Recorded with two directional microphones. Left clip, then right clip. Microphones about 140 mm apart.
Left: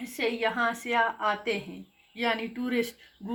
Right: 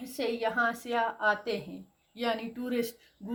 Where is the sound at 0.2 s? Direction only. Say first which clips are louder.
Left 2 dB; 60° right (ahead or behind).